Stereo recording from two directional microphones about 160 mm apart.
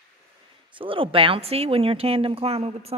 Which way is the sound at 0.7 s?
35° right (ahead or behind).